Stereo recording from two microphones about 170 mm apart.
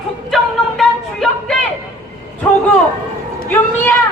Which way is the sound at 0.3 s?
Centre (ahead or behind).